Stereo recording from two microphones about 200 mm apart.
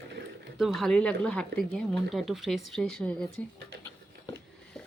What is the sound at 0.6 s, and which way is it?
Speech, centre (ahead or behind).